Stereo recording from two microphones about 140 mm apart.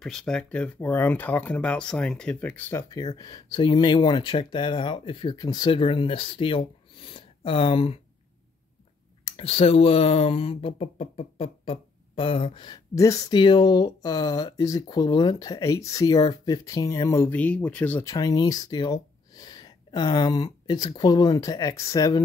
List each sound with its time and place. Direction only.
0.0 s speech: 5° left (ahead or behind); by 8.0 s 40° left (ahead or behind)
9.2 s speech: 45° left (ahead or behind); by 17.4 s 20° left (ahead or behind)
17.4 s speech: 10° left (ahead or behind)
18.0 s speech: 25° left (ahead or behind)